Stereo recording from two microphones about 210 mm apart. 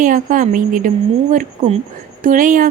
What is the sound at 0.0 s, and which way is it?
A woman's voice, 40° right (ahead or behind).